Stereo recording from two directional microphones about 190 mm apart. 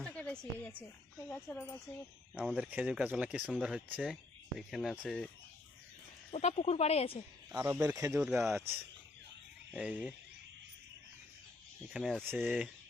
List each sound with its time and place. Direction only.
0.0 s a sound: 5° left (ahead or behind)
1.3 s speech: 10° left (ahead or behind)
2.3 s speech: 5° right (ahead or behind)
6.3 s a woman's voice: 35° left (ahead or behind)
7.5 s speech: 10° right (ahead or behind)
9.7 s speech: 5° right (ahead or behind)
11.9 s speech: centre (ahead or behind)
12.2 s speech: 10° right (ahead or behind)